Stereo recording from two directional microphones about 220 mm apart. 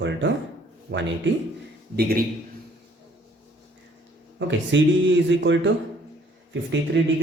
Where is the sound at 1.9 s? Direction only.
45° right (ahead or behind).